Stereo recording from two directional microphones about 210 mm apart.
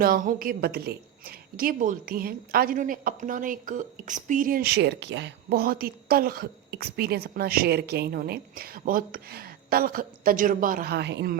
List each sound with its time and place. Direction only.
0.0 s a woman's voice: 40° right (ahead or behind)